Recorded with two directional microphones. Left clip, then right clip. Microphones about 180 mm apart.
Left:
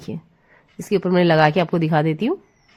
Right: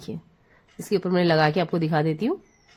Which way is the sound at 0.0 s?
30° left (ahead or behind).